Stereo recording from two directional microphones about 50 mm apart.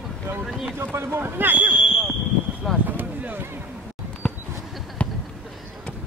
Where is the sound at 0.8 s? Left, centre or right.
Right.